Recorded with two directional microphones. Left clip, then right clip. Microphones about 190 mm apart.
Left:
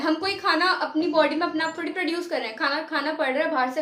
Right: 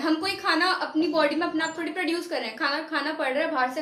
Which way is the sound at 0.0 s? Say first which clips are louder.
Left 2 dB; 20° left (ahead or behind).